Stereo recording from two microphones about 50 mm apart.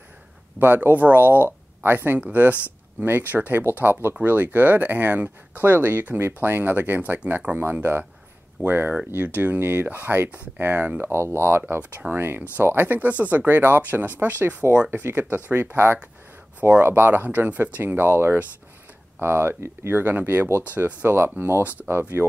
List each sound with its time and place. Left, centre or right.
0.6 s speech: right
2.1 s speech: right
4.1 s speech: right
8.6 s speech: right
11.0 s speech: right
21.4 s speech: right